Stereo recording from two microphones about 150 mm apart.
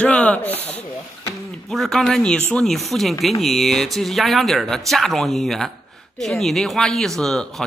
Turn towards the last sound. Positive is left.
turn(degrees=0)  # may be behind; listen again after turning